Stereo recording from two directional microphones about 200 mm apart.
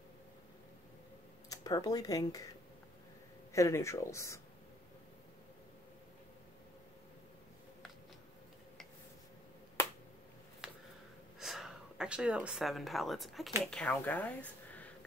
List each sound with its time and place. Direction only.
1.5 s speech: 20° left (ahead or behind)
3.5 s speech: 15° left (ahead or behind)
11.3 s speech: centre (ahead or behind)